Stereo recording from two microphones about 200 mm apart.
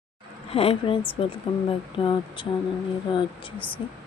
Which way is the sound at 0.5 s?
30° left (ahead or behind).